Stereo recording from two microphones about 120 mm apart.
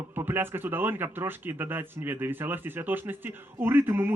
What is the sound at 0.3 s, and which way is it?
A man's voice, 15° right (ahead or behind).